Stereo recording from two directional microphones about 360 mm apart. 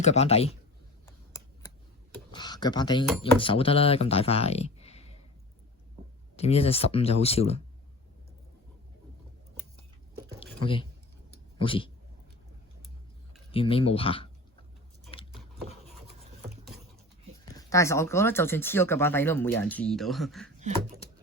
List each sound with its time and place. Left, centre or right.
0.0 s speech: centre
1.0 s a sound: centre
2.3 s speech: centre
6.3 s speech: centre
11.6 s speech: centre
13.5 s speech: centre
15.1 s a sound: centre
15.6 s a sound: centre
17.6 s speech: centre
20.6 s speech: centre